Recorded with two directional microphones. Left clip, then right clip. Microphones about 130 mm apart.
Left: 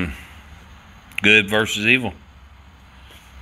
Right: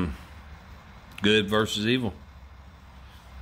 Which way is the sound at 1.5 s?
15° right (ahead or behind).